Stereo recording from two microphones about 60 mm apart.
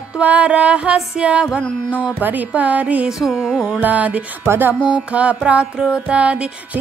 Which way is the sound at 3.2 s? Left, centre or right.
Centre.